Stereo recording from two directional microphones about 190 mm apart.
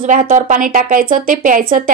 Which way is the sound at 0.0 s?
45° right (ahead or behind).